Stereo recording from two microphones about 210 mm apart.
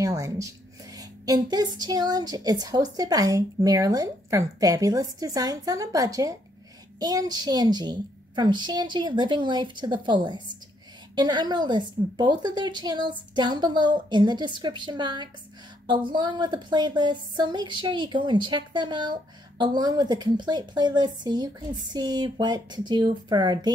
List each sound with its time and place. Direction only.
0.0 s a woman's voice: 15° right (ahead or behind)